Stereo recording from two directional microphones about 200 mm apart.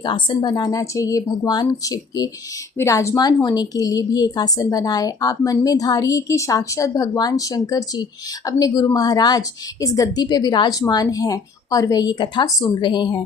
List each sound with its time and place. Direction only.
0.0 s a woman's voice: 20° left (ahead or behind)